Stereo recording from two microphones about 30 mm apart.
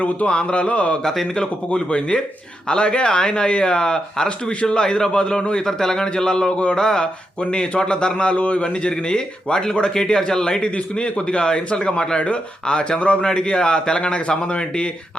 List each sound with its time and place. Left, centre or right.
0.3 s a man's voice: left
1.0 s speech: centre
1.4 s a man's voice: left
5.6 s a man's voice: centre; by 8.6 s left
8.6 s a man's voice: left
13.0 s a man's voice: left
13.2 s a man's voice: left